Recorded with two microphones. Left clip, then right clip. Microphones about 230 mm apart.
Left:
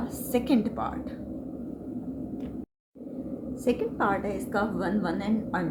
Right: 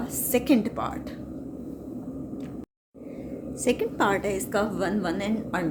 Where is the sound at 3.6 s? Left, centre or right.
Right.